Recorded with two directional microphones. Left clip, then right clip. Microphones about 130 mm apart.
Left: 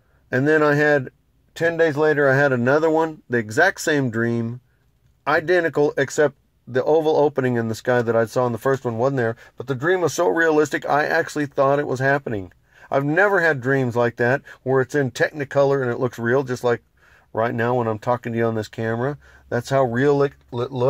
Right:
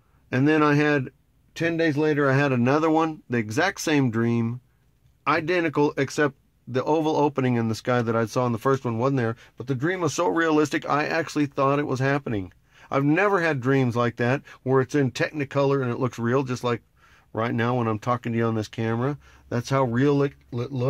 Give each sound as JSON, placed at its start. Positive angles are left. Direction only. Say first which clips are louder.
{"t": 0.3, "sound": "speech", "louder": "left 3 dB", "side_deg": -5}
{"t": 13.0, "sound": "speech", "louder": "left 3 dB", "side_deg": -20}
{"t": 13.3, "sound": "speech", "louder": "left 4 dB", "side_deg": -5}
{"t": 18.2, "sound": "speech", "louder": "left 4 dB", "side_deg": 0}